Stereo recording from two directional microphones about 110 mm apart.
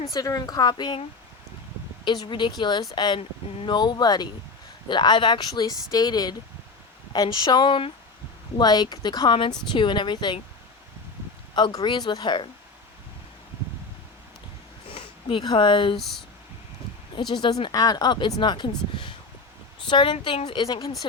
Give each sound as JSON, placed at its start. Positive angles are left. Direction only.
{"t": 0.1, "sound": "speech", "side_deg": 35}
{"t": 2.0, "sound": "speech", "side_deg": 45}
{"t": 8.5, "sound": "speech", "side_deg": 40}
{"t": 11.5, "sound": "speech", "side_deg": 40}
{"t": 14.8, "sound": "speech", "side_deg": 55}
{"t": 16.0, "sound": "speech", "side_deg": 0}
{"t": 17.2, "sound": "speech", "side_deg": 45}
{"t": 19.9, "sound": "speech", "side_deg": 50}